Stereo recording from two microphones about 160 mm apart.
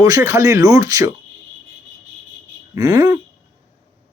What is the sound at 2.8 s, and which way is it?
Speech, 25° right (ahead or behind).